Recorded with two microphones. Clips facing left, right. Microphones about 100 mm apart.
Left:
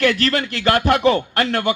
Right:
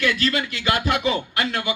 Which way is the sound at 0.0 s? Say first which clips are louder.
Left 4 dB; 60° left (ahead or behind).